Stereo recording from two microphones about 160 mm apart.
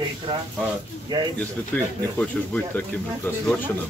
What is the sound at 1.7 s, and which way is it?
Speech, 10° left (ahead or behind).